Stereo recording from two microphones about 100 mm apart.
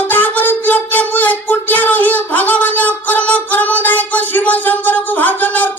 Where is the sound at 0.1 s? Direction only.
20° left (ahead or behind).